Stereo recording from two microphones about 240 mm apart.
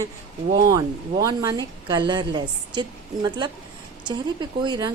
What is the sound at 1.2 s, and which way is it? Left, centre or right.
A woman's voice, centre.